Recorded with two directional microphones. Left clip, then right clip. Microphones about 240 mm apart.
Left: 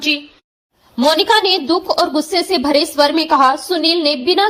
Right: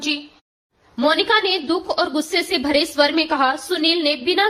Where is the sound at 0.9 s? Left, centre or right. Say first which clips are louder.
Left 4 dB; centre.